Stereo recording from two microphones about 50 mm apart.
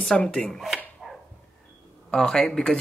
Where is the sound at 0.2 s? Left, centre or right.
Centre.